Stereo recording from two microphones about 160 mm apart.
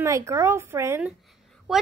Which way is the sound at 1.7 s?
Centre (ahead or behind).